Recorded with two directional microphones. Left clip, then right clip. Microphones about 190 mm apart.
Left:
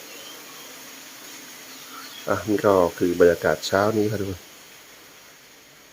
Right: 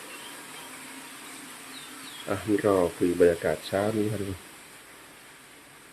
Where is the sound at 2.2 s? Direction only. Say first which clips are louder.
Left 5 dB; 20° left (ahead or behind).